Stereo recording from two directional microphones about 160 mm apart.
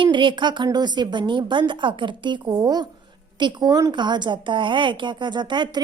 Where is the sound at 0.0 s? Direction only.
30° right (ahead or behind).